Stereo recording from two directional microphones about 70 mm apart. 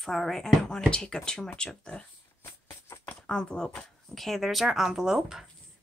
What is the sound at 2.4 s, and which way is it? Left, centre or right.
Music, left.